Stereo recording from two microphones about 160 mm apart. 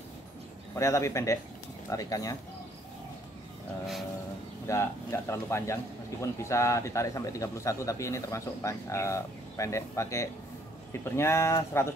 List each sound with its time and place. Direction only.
0.7 s speech: 20° left (ahead or behind)
4.6 s speech: 15° left (ahead or behind)